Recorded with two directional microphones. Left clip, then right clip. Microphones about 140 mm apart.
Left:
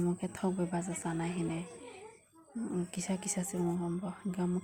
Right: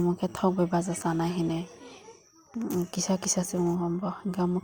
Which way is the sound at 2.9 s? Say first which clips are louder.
Right 9 dB; 40° right (ahead or behind).